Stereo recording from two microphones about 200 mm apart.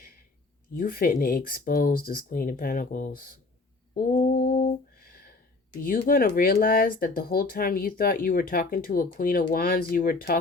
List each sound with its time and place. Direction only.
0.8 s speech: 45° left (ahead or behind)
4.2 s speech: 45° left (ahead or behind)
5.8 s speech: 45° left (ahead or behind)